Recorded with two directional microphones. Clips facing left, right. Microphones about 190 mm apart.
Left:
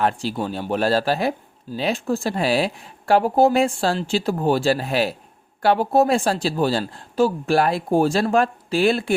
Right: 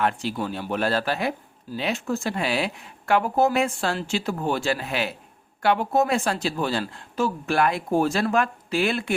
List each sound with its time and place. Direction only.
0.0 s speech: 30° left (ahead or behind)